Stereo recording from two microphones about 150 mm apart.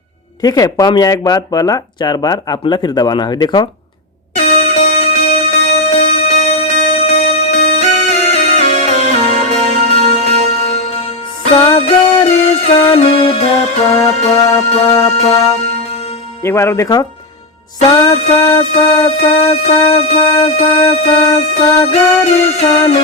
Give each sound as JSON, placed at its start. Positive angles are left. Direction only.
{"t": 0.4, "sound": "speech", "side_deg": 25}
{"t": 4.4, "sound": "music", "side_deg": 45}
{"t": 14.8, "sound": "speech", "side_deg": 25}
{"t": 15.9, "sound": "music", "side_deg": 40}
{"t": 16.4, "sound": "speech", "side_deg": 15}
{"t": 18.8, "sound": "music", "side_deg": 40}